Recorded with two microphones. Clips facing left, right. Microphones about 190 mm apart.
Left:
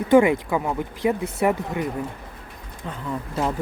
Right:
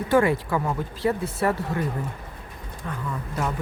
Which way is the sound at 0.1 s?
15° left (ahead or behind).